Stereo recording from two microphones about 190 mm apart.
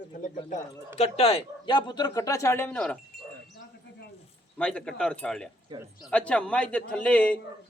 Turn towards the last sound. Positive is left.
turn(degrees=5)  # may be behind; listen again after turning